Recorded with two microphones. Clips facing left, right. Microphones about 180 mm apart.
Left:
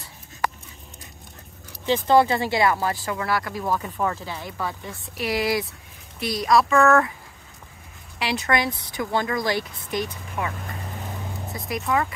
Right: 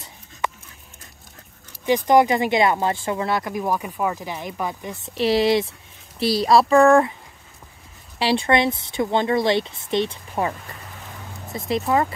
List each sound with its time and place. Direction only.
1.9 s speech: 15° right (ahead or behind)
8.2 s speech: 30° right (ahead or behind)
11.5 s speech: 25° right (ahead or behind)